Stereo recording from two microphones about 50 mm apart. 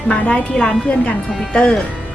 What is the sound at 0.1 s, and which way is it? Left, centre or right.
A woman's voice, centre.